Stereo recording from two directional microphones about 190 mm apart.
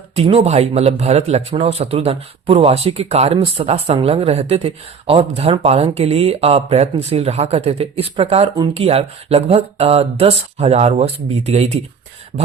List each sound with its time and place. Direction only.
0.2 s speech: 30° right (ahead or behind)